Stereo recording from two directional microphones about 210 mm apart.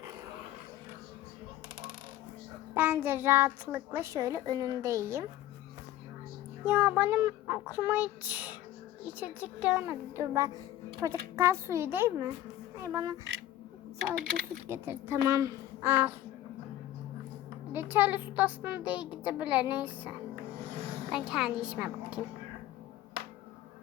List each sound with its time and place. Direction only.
2.7 s a child's voice: 10° right (ahead or behind)
6.7 s a child's voice: 10° right (ahead or behind)
14.2 s speech: 45° right (ahead or behind)
14.7 s a child's voice: 10° right (ahead or behind)
17.7 s a child's voice: 10° right (ahead or behind)